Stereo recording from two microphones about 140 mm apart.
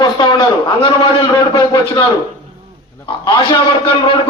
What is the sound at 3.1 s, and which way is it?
A man's voice, 35° left (ahead or behind).